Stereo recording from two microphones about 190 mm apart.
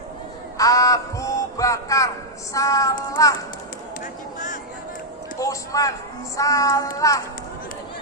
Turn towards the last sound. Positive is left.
turn(degrees=15)  # may be behind; listen again after turning